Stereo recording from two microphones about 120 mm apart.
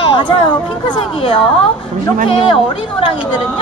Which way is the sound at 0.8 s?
45° left (ahead or behind).